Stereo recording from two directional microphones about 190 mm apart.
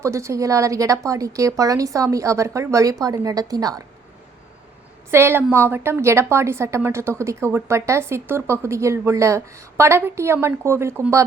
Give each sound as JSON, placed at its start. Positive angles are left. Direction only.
{"t": 0.0, "sound": "a woman's voice", "side_deg": -15}
{"t": 5.1, "sound": "a woman's voice", "side_deg": -10}